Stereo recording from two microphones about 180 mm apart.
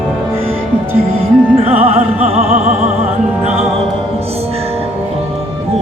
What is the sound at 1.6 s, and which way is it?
Music, 35° right (ahead or behind).